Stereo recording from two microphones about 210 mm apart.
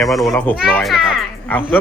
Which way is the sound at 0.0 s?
Centre (ahead or behind).